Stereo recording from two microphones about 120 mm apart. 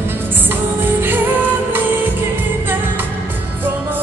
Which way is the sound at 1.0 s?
15° right (ahead or behind).